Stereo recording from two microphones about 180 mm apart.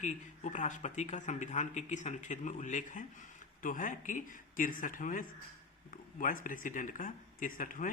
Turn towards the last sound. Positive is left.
turn(degrees=50)  # may be behind; listen again after turning